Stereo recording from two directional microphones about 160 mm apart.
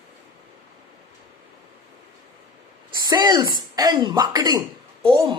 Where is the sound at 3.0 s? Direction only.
25° right (ahead or behind).